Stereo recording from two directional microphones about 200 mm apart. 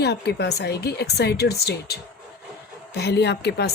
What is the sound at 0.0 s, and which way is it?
A woman's voice, 55° left (ahead or behind).